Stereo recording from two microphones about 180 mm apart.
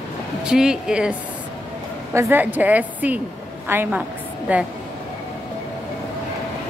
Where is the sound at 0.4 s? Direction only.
5° right (ahead or behind).